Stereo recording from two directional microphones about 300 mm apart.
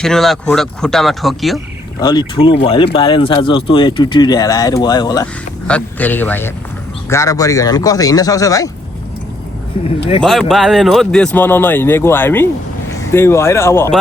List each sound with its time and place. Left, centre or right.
0.0 s speech: centre
2.0 s speech: centre
10.5 s speech: centre